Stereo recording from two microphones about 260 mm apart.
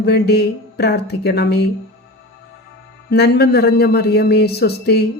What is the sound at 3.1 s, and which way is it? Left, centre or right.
Speech, left.